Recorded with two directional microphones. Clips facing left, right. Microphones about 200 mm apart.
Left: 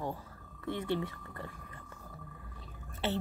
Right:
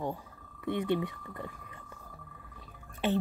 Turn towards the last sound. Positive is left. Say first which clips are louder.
# right 5 dB
turn(degrees=-15)  # may be behind; listen again after turning